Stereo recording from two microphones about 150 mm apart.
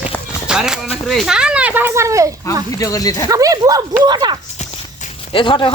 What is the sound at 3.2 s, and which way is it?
Speech, 25° right (ahead or behind).